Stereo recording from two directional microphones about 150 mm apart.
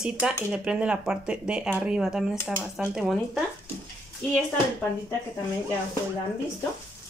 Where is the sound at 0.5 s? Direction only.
5° right (ahead or behind).